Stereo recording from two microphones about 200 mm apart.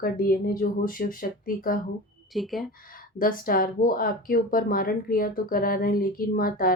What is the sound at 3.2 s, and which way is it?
Speech, 45° left (ahead or behind).